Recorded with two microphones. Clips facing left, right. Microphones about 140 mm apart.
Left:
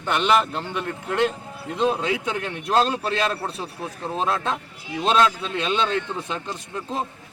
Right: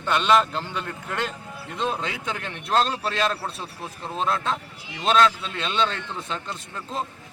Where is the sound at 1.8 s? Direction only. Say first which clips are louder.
Left 6 dB; 10° left (ahead or behind).